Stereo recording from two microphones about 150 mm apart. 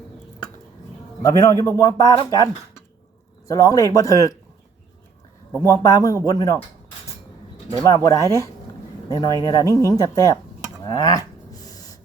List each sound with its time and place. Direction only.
1.2 s a man's voice: 20° left (ahead or behind)
5.6 s a man's voice: 20° left (ahead or behind)
7.9 s a man's voice: 20° left (ahead or behind)